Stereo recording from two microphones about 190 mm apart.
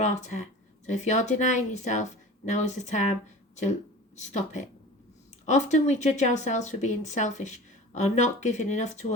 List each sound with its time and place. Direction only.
0.0 s a woman's voice: 40° left (ahead or behind)